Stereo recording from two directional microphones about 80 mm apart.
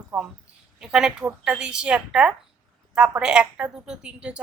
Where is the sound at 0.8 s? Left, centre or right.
Centre.